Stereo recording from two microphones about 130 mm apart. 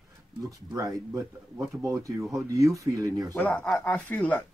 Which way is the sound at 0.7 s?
25° right (ahead or behind).